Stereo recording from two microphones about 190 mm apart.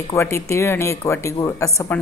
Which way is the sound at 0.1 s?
15° left (ahead or behind).